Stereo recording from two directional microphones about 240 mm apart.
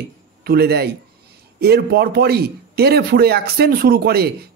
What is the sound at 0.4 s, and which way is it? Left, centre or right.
A man's voice, right.